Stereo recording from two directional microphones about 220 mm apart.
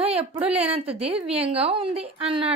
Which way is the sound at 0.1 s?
25° right (ahead or behind).